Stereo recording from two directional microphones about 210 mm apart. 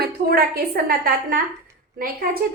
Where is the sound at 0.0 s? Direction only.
45° right (ahead or behind).